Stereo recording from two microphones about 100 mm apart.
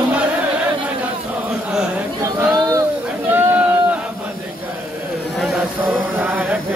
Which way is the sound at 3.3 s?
20° right (ahead or behind).